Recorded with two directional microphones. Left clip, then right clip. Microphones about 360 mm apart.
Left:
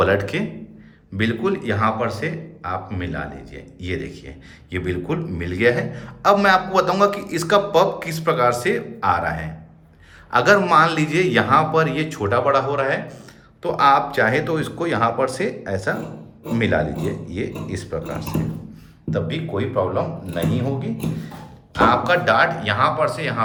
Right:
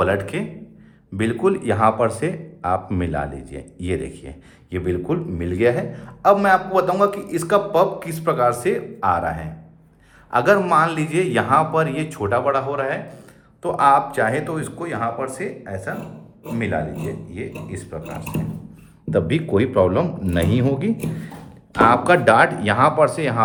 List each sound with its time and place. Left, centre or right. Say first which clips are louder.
0.0 s a man's voice: left 2 dB; centre
19.5 s a man's voice: right 4 dB; right